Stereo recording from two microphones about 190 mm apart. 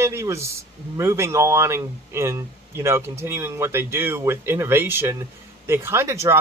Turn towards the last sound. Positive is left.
turn(degrees=-15)  # may be behind; listen again after turning